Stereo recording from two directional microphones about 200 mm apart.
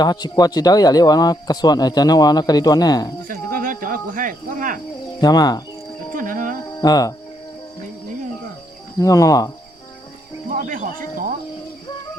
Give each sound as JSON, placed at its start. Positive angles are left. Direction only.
{"t": 0.0, "sound": "speech", "side_deg": 20}
{"t": 3.2, "sound": "speech", "side_deg": -45}
{"t": 5.2, "sound": "speech", "side_deg": 20}
{"t": 6.1, "sound": "music", "side_deg": -40}
{"t": 6.8, "sound": "speech", "side_deg": 20}
{"t": 9.0, "sound": "speech", "side_deg": 15}
{"t": 10.5, "sound": "speech", "side_deg": -40}